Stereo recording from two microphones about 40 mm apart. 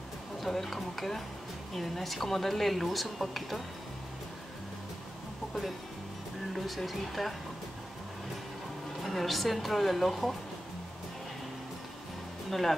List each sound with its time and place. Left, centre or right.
0.4 s speech: centre
5.5 s speech: centre
9.0 s speech: centre
12.4 s speech: centre